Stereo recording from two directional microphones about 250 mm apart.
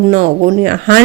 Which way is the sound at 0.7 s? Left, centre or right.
Right.